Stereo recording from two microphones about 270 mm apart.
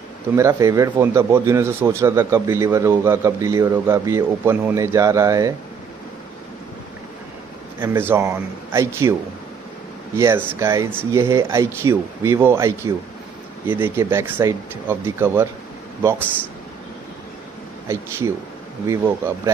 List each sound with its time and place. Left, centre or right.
0.4 s speech: centre
7.8 s speech: centre
10.1 s speech: centre
17.8 s speech: centre